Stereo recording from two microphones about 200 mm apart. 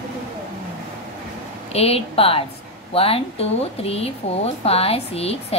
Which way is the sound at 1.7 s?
30° left (ahead or behind).